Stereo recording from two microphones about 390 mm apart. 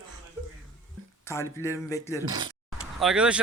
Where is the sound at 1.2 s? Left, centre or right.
Centre.